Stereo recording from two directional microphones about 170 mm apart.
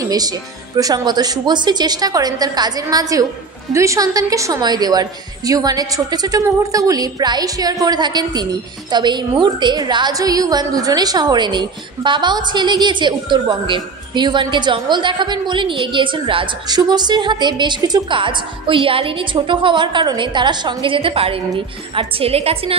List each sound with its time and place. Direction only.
0.0 s a woman's voice: 20° right (ahead or behind)